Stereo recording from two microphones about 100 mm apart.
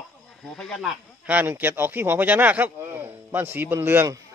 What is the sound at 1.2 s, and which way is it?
Speech, 15° right (ahead or behind).